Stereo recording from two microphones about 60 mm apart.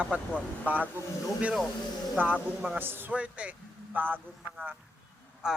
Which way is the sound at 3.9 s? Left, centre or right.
Right.